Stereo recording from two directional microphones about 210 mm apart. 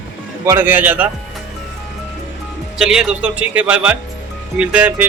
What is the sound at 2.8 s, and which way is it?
Speech, 5° right (ahead or behind).